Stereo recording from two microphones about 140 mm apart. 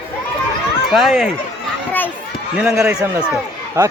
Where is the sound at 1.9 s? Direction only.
15° left (ahead or behind).